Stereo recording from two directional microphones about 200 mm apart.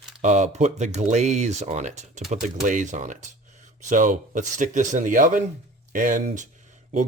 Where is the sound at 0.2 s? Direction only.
35° right (ahead or behind).